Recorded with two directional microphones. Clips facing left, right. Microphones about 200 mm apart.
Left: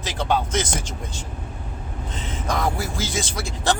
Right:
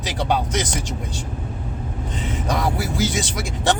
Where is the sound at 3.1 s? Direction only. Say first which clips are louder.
Right 2 dB; 15° right (ahead or behind).